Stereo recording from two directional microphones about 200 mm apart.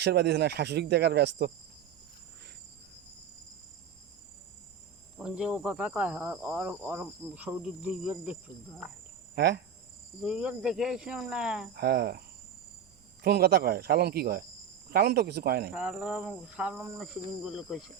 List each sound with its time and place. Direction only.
0.0 s speech: 55° right (ahead or behind)
5.1 s cricket: 5° right (ahead or behind)
9.3 s speech: 55° right (ahead or behind)
10.2 s speech: 5° right (ahead or behind)
11.7 s speech: 55° right (ahead or behind)
13.2 s speech: 55° right (ahead or behind)
15.7 s speech: 5° right (ahead or behind)